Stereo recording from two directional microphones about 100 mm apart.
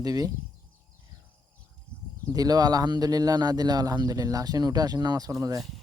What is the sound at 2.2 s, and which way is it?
Speech, 40° right (ahead or behind).